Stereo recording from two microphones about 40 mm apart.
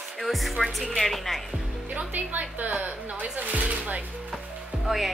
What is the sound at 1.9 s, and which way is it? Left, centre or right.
A woman's voice, right.